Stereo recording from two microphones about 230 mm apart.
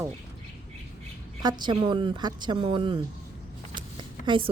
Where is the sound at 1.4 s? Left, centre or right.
Centre.